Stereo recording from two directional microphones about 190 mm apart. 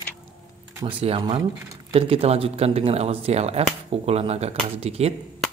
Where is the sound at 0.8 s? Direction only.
30° right (ahead or behind).